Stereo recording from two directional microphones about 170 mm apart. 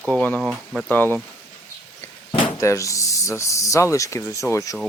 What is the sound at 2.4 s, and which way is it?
Speech, 20° left (ahead or behind).